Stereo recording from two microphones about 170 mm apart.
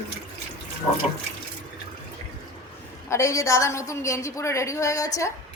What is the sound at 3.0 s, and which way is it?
A woman's voice, 15° left (ahead or behind).